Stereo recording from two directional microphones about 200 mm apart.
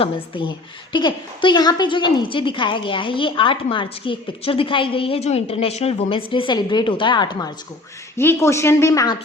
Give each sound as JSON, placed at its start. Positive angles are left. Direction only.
{"t": 0.0, "sound": "a woman's voice", "side_deg": 25}